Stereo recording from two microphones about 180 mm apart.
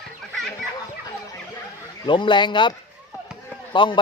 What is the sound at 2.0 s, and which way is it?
Speech, 25° left (ahead or behind).